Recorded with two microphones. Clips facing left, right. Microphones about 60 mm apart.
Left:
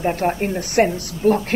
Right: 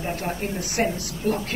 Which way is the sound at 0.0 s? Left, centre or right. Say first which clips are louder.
Left 8 dB; left.